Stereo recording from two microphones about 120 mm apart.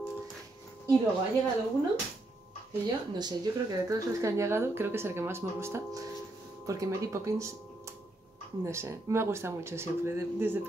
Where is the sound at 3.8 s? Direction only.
25° right (ahead or behind).